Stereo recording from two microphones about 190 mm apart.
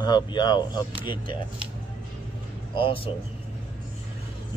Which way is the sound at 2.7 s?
30° left (ahead or behind).